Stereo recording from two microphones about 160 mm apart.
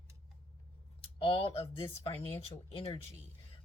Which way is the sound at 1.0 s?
35° left (ahead or behind).